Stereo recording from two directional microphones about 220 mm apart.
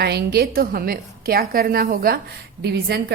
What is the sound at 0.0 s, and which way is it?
A woman's voice, 45° right (ahead or behind).